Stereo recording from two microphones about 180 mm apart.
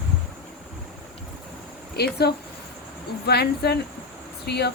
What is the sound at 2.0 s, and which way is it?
A woman's voice, 65° left (ahead or behind).